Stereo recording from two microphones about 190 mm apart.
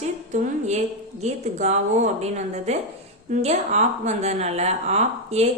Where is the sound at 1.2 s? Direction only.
35° right (ahead or behind).